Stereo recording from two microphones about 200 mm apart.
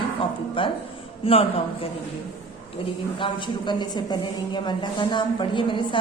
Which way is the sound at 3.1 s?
25° left (ahead or behind).